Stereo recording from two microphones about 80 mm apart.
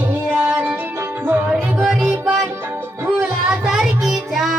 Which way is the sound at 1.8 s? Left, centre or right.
Centre.